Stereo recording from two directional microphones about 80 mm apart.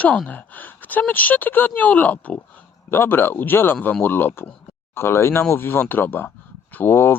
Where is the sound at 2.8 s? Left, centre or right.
Left.